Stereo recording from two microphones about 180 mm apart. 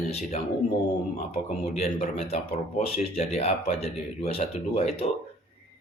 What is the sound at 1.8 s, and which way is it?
Speech, 35° left (ahead or behind).